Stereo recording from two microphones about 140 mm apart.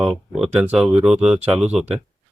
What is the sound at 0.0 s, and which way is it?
Speech, centre (ahead or behind).